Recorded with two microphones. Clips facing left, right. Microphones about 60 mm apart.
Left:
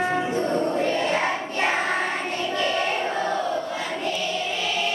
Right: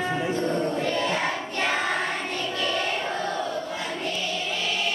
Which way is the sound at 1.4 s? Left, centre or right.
Centre.